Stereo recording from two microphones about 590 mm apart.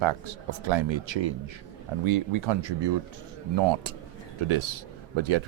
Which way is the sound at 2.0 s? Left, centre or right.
Right.